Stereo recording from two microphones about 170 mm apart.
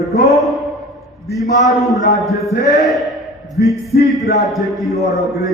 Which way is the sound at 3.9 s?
70° left (ahead or behind).